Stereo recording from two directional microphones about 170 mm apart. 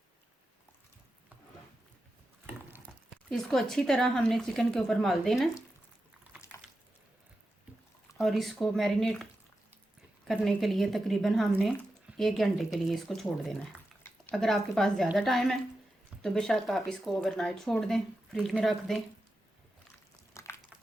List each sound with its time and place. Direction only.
3.2 s speech: centre (ahead or behind)
8.2 s speech: centre (ahead or behind)
10.2 s speech: centre (ahead or behind)
20.4 s a sound: 15° left (ahead or behind)